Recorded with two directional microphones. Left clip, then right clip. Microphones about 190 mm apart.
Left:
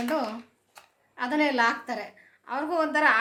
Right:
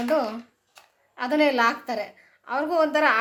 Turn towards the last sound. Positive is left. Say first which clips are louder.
# right 2 dB
turn(degrees=-30)  # may be behind; listen again after turning